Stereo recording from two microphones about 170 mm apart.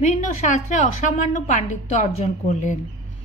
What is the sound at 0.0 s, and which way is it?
A woman's voice, 45° left (ahead or behind).